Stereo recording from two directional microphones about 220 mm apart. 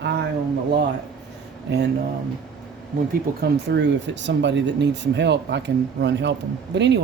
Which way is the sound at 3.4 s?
50° right (ahead or behind).